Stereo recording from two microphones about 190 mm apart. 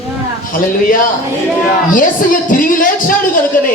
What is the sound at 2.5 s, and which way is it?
Speech, 45° left (ahead or behind).